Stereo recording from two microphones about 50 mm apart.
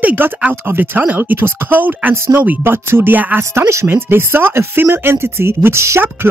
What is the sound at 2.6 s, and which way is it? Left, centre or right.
Speech, right.